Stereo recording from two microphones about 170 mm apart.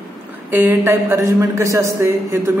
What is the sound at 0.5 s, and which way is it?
A man's voice, 15° right (ahead or behind).